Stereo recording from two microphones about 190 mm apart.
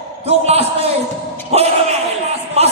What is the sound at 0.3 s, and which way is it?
A man's voice, 35° right (ahead or behind).